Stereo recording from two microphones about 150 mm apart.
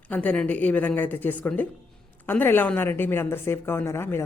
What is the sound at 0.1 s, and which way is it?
A woman's voice, 10° left (ahead or behind).